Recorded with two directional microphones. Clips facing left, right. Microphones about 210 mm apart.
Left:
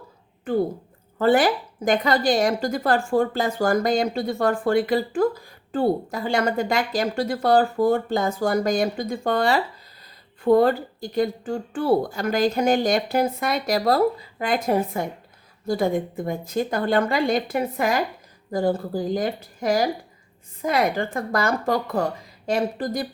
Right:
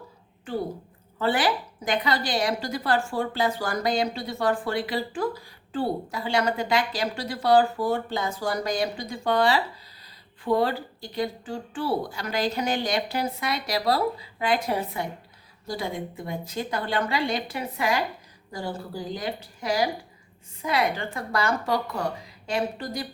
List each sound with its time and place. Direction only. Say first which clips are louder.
1.2 s a woman's voice: left 6 dB; 50° left (ahead or behind)